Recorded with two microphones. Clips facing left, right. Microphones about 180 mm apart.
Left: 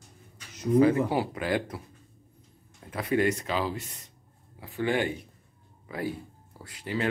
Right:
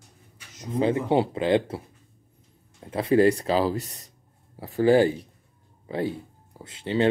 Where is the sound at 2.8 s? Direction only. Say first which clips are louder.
Right 7 dB; 25° right (ahead or behind).